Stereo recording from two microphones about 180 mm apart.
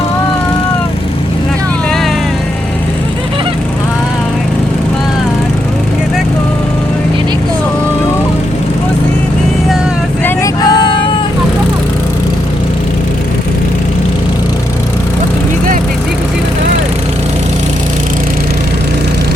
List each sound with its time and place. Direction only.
10.2 s vehicle: 20° left (ahead or behind)